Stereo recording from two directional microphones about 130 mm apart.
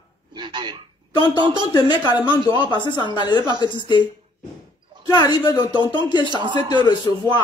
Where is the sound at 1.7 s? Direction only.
35° left (ahead or behind).